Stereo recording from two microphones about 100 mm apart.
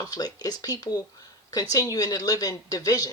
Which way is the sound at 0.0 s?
40° left (ahead or behind).